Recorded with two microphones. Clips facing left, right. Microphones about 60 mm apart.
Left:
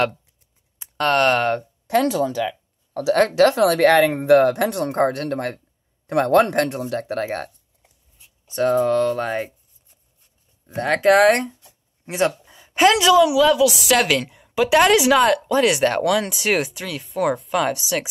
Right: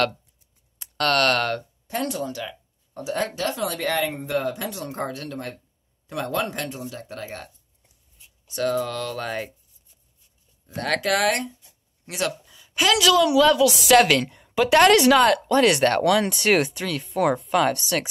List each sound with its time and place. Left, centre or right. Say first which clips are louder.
0.7 s speech: left 3 dB; centre
1.9 s speech: left 9 dB; left
8.5 s speech: left 7 dB; left
10.7 s a woman's voice: left 7 dB; left; by 18.0 s centre